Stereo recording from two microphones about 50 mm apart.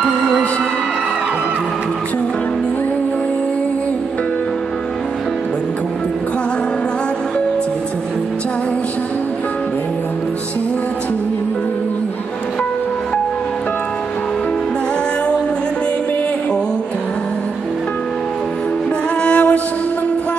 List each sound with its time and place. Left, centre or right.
19.2 s music: left